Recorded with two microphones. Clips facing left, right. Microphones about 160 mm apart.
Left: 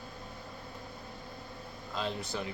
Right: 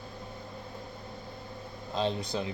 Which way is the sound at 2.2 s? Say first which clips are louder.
Right 4 dB; 15° right (ahead or behind).